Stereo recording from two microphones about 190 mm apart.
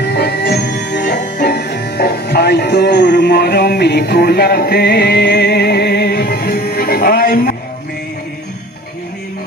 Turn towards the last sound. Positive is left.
turn(degrees=50)  # may be behind; listen again after turning